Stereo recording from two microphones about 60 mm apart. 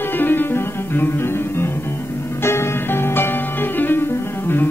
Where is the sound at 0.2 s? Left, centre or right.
Left.